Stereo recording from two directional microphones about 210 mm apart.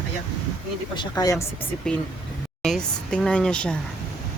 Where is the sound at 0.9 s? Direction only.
20° left (ahead or behind).